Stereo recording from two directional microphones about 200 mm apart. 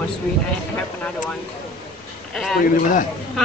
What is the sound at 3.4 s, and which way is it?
Speech, centre (ahead or behind).